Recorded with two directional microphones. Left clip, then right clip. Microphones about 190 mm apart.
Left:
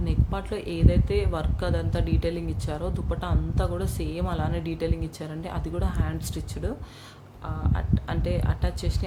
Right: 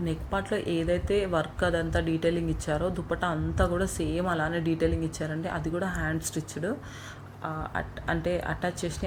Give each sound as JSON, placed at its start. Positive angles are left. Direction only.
{"t": 0.0, "sound": "speech", "side_deg": 0}